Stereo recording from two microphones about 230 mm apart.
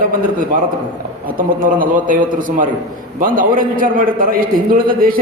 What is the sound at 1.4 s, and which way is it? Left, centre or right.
A man's voice, right.